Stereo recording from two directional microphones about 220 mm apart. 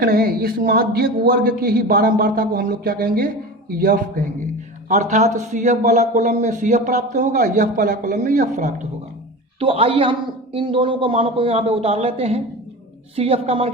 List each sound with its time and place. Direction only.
0.0 s a man's voice: 45° right (ahead or behind)
9.6 s a man's voice: 25° right (ahead or behind)